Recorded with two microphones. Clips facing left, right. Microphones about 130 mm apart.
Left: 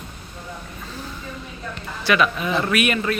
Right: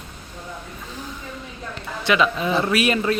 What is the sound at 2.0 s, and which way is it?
Speech, 20° right (ahead or behind).